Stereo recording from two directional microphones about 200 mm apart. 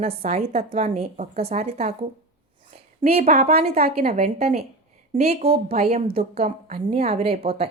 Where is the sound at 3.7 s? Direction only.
50° right (ahead or behind).